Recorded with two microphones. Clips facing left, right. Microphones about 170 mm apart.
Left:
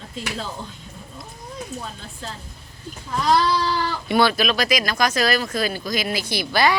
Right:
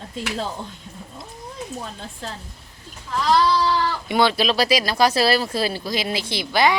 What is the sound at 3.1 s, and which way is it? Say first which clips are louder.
Speech: even; 15° left (ahead or behind).